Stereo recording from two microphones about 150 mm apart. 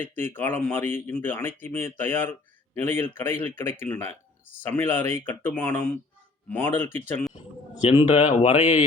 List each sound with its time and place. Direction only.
0.0 s speech: 15° left (ahead or behind)
7.3 s speech: 45° left (ahead or behind)